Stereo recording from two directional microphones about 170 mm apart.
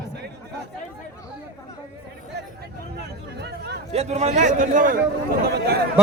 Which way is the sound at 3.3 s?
75° right (ahead or behind).